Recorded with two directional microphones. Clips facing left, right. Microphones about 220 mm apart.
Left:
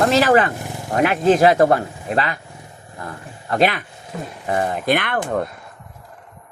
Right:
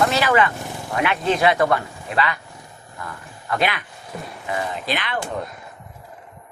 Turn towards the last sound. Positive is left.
turn(degrees=55)  # may be behind; listen again after turning